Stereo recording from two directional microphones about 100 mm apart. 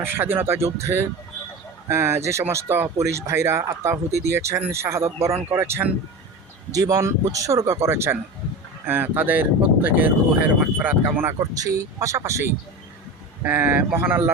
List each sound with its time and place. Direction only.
0.0 s speech: 25° right (ahead or behind)
6.7 s speech: 35° right (ahead or behind); by 11.3 s 20° right (ahead or behind)
11.5 s speech: 35° right (ahead or behind)